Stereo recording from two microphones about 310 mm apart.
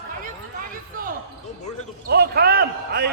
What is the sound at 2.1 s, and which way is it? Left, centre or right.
Basketball bounce, right.